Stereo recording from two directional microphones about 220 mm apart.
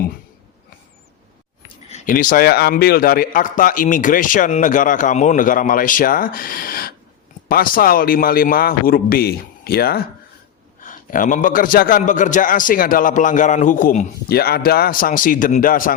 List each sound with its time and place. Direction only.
1.9 s a man's voice: 35° left (ahead or behind)